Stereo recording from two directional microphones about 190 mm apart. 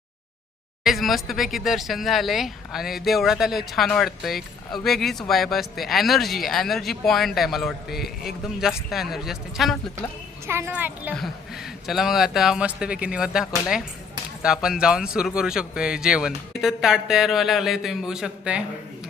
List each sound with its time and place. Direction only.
0.9 s speech: centre (ahead or behind)
10.4 s speech: 15° right (ahead or behind)